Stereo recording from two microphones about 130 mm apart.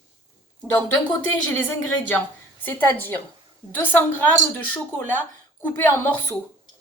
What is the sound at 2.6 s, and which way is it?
A woman's voice, 15° left (ahead or behind).